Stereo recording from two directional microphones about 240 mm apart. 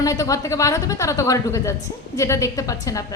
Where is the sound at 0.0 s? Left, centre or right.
Centre.